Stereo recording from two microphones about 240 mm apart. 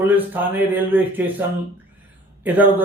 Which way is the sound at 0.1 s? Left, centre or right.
Centre.